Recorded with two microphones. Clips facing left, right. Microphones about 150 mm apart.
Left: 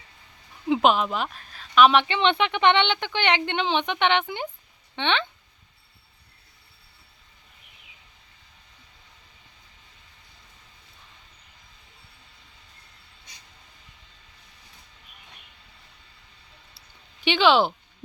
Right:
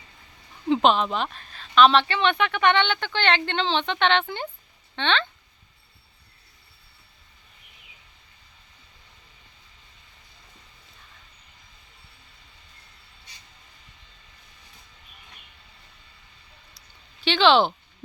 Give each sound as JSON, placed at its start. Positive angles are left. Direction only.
{"t": 0.7, "sound": "speech", "side_deg": 10}
{"t": 17.2, "sound": "speech", "side_deg": 15}